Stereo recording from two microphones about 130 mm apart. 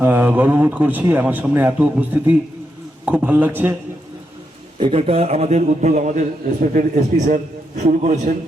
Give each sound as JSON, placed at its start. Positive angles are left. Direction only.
{"t": 0.0, "sound": "a man's voice", "side_deg": -15}
{"t": 4.8, "sound": "a man's voice", "side_deg": -50}